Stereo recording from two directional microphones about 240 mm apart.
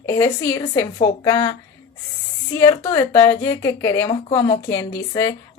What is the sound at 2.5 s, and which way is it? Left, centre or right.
A woman's voice, centre.